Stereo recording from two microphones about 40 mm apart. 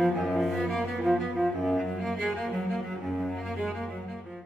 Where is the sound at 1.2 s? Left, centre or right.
Centre.